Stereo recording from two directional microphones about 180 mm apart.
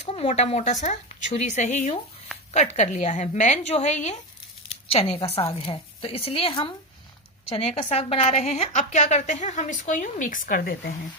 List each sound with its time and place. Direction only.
0.0 s a woman's voice: 35° left (ahead or behind); by 10.9 s 55° left (ahead or behind)